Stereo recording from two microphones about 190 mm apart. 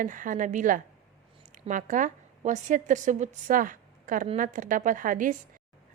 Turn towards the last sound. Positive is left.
turn(degrees=-45)  # may be behind; listen again after turning